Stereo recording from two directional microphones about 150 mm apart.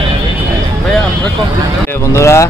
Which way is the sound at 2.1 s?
20° left (ahead or behind).